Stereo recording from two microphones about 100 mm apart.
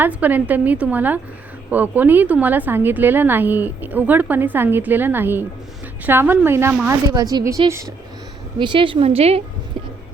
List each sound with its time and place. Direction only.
0.0 s a woman's voice: 15° right (ahead or behind)
7.1 s a woman's voice: 40° right (ahead or behind)
8.5 s a woman's voice: 55° right (ahead or behind); by 9.4 s 85° right